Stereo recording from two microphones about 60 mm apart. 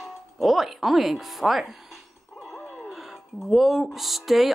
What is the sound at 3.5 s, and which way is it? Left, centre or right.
Speech, centre.